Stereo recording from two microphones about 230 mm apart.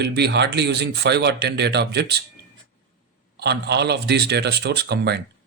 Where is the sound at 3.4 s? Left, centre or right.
Right.